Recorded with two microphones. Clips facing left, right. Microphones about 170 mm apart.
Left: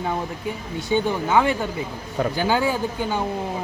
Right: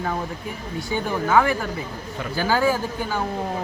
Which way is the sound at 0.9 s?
20° left (ahead or behind).